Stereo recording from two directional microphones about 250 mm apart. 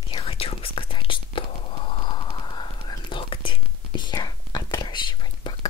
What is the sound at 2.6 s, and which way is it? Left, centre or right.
Whispering, centre.